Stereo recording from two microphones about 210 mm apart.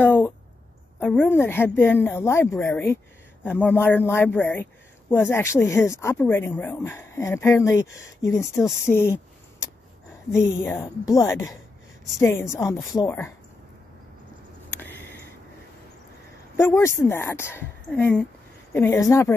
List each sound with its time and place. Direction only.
0.0 s a sound: 10° left (ahead or behind)
0.9 s speech: 10° left (ahead or behind)
10.3 s speech: centre (ahead or behind)
10.8 s speech: 15° left (ahead or behind)
14.8 s a sound: 10° left (ahead or behind)
16.5 s speech: 10° left (ahead or behind)